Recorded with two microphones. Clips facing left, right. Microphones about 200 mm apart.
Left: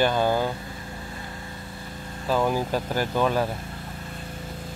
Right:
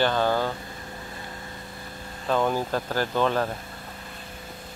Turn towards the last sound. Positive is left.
turn(degrees=10)  # may be behind; listen again after turning